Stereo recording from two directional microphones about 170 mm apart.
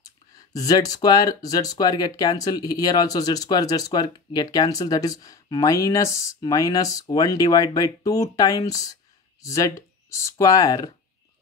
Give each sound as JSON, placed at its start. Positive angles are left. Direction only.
{"t": 0.5, "sound": "speech", "side_deg": 20}